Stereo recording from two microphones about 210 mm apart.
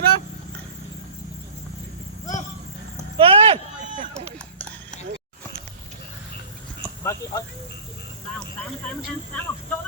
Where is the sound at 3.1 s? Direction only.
25° right (ahead or behind).